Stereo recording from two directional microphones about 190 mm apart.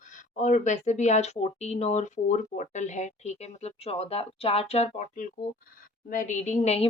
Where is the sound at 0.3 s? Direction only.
40° left (ahead or behind).